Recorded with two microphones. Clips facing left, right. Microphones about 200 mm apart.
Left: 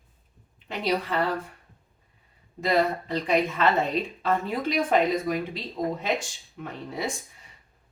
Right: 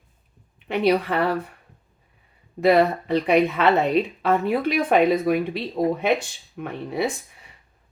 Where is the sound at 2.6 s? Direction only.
65° right (ahead or behind).